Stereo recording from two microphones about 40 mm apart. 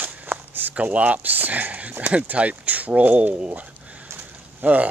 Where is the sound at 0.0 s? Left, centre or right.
Right.